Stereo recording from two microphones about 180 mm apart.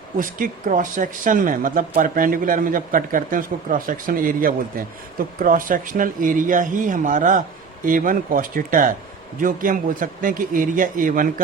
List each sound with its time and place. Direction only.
0.2 s speech: 50° right (ahead or behind)